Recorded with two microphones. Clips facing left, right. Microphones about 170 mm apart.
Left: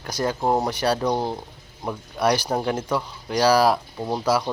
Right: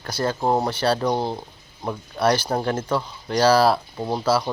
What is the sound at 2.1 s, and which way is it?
Speech, 15° left (ahead or behind).